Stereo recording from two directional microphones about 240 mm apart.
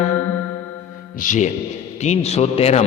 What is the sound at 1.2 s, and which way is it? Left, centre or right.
Mantra, left.